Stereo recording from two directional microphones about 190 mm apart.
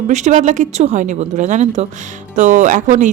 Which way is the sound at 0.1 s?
40° right (ahead or behind).